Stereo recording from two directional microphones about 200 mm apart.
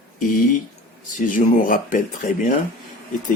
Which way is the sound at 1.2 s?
40° left (ahead or behind).